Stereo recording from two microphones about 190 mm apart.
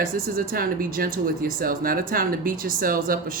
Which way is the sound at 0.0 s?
50° right (ahead or behind).